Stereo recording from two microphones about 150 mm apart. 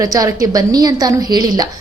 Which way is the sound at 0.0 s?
25° right (ahead or behind).